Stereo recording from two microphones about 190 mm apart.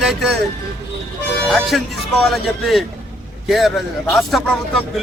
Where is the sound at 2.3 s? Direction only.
Centre (ahead or behind).